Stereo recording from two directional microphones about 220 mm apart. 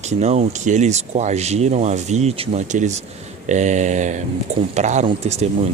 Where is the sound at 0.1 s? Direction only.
30° right (ahead or behind).